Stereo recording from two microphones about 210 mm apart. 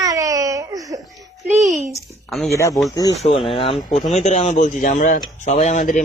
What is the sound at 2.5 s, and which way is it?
Speech, 15° left (ahead or behind).